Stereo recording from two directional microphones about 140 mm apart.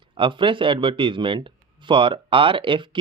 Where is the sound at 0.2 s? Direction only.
35° right (ahead or behind).